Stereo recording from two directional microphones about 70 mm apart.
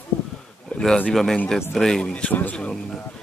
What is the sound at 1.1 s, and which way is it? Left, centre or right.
Speech, centre.